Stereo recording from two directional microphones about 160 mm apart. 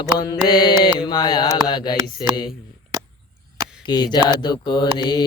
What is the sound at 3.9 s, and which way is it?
Mantra, 25° left (ahead or behind).